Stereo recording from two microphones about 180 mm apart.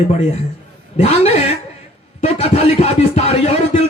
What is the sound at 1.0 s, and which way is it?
Speech, 35° left (ahead or behind).